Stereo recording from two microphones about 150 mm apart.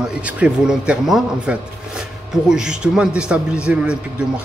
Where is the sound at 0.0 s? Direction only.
10° right (ahead or behind).